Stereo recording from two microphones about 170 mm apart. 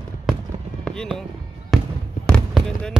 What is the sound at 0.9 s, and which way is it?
Speech, 5° left (ahead or behind).